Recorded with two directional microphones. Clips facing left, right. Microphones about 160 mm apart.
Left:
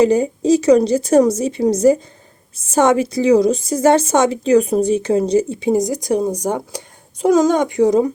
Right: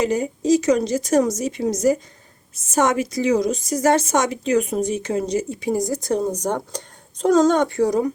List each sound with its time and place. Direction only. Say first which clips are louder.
0.0 s a woman's voice: left 7 dB; 30° left (ahead or behind)